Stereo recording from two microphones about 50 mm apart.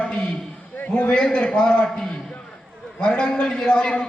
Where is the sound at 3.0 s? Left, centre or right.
Left.